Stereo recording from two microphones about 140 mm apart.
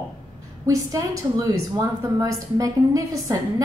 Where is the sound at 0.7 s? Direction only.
20° right (ahead or behind).